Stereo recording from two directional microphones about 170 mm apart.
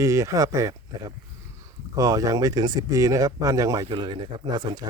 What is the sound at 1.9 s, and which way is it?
Speech, 20° right (ahead or behind).